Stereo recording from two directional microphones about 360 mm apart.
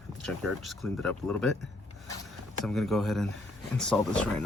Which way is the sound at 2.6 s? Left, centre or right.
Centre.